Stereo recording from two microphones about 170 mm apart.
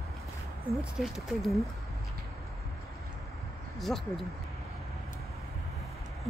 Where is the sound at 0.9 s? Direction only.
Centre (ahead or behind).